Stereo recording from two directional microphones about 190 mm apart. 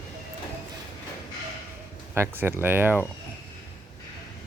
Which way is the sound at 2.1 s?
10° right (ahead or behind).